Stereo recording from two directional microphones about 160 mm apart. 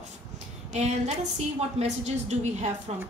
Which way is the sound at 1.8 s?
45° right (ahead or behind).